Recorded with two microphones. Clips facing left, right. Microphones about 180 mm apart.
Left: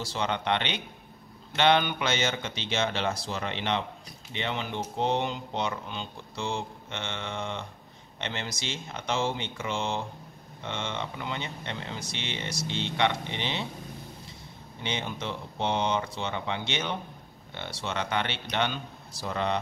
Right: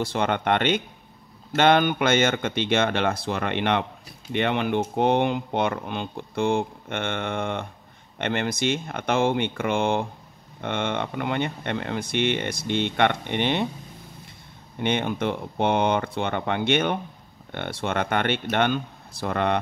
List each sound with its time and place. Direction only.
0.0 s speech: 55° right (ahead or behind)
14.8 s speech: 55° right (ahead or behind)